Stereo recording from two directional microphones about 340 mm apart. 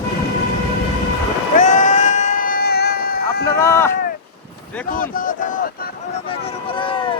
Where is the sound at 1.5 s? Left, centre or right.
Left.